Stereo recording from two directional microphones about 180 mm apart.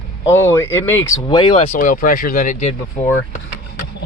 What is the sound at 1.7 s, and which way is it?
Speech, 50° left (ahead or behind).